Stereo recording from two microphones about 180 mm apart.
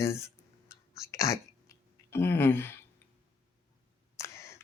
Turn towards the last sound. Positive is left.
turn(degrees=15)  # may be behind; listen again after turning